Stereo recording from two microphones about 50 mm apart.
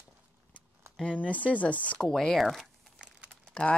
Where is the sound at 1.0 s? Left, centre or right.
Left.